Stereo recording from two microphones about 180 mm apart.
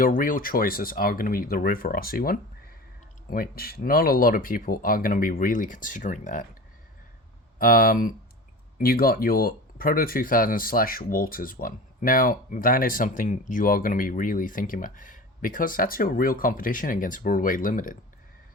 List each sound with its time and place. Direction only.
0.0 s speech: 50° left (ahead or behind)
7.6 s speech: 50° left (ahead or behind)